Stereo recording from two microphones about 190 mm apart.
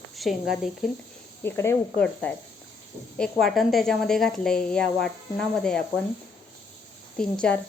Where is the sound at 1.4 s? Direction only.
15° left (ahead or behind).